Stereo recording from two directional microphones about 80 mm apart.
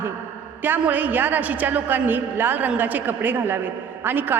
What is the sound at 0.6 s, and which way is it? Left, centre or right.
A woman's voice, right.